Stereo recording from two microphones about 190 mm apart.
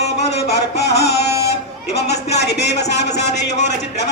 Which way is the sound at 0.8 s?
60° left (ahead or behind).